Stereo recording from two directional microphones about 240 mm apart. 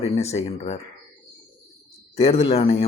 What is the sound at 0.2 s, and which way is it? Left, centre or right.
Speech, left.